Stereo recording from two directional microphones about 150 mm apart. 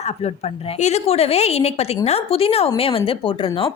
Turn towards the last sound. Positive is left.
turn(degrees=35)  # may be behind; listen again after turning